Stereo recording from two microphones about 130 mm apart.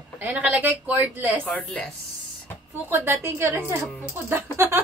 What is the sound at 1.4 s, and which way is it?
Speech, 10° left (ahead or behind).